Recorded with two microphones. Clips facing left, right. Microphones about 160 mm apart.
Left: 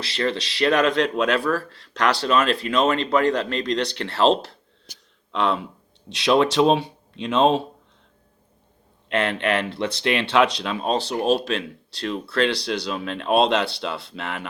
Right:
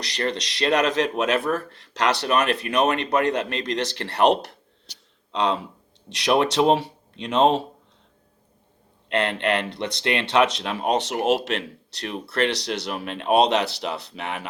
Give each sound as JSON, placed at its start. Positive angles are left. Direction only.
{"t": 0.1, "sound": "speech", "side_deg": -20}
{"t": 9.0, "sound": "a man's voice", "side_deg": -20}